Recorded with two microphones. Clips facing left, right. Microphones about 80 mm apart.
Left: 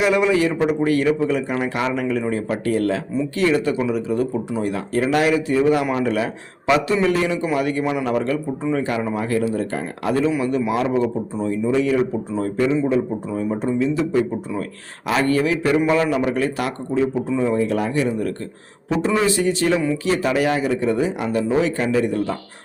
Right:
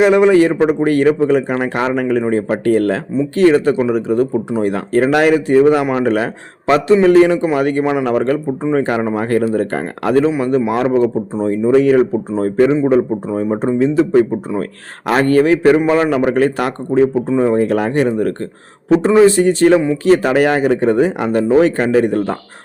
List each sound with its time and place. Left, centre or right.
0.0 s a man's voice: right
10.2 s a man's voice: right
19.2 s speech: right